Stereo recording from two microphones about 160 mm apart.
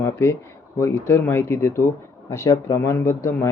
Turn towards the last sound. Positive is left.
turn(degrees=15)  # may be behind; listen again after turning